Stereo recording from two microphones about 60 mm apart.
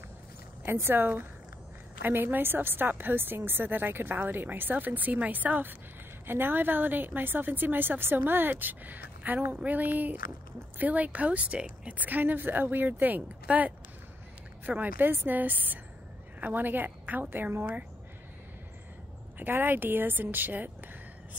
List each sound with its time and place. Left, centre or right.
0.7 s a woman's voice: right
14.8 s a woman's voice: right
19.3 s a woman's voice: right